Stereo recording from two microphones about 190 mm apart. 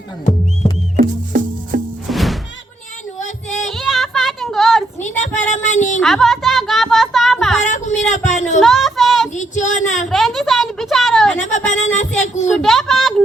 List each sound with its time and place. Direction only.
0.9 s music: 45° right (ahead or behind)
2.0 s music: centre (ahead or behind)
3.2 s music: 40° left (ahead or behind)
3.7 s child singing: centre (ahead or behind)
5.0 s child singing: 40° left (ahead or behind)
6.0 s a sound: centre (ahead or behind)
7.6 s speech: 40° left (ahead or behind)
8.6 s a sound: centre (ahead or behind)
9.3 s speech: 40° left (ahead or behind)
10.1 s a sound: centre (ahead or behind)
11.3 s speech: 40° left (ahead or behind)
12.5 s speech: centre (ahead or behind)